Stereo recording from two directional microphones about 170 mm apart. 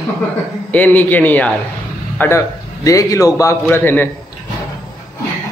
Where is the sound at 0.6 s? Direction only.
10° left (ahead or behind).